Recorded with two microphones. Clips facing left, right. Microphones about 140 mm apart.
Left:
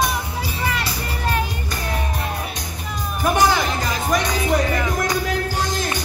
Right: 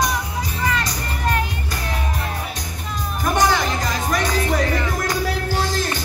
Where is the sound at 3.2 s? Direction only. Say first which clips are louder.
Left 1 dB; 5° left (ahead or behind).